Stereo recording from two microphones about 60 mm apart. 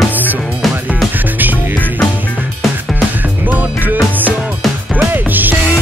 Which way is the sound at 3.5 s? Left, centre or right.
Right.